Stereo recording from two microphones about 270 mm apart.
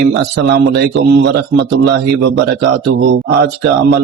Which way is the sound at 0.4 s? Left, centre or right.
Right.